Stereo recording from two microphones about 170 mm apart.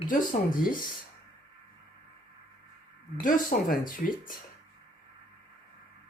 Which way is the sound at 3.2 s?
50° left (ahead or behind).